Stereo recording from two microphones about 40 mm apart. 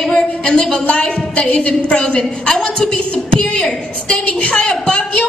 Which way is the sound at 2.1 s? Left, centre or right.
Centre.